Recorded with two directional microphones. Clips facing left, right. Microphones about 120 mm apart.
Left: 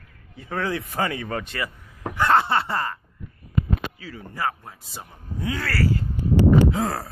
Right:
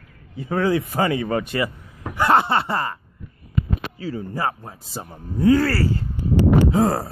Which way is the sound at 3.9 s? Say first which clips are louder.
Right 8 dB; 30° right (ahead or behind).